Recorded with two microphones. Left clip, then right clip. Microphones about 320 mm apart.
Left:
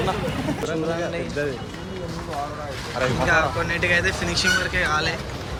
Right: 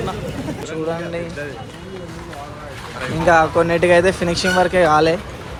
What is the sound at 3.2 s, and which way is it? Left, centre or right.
Speech, centre.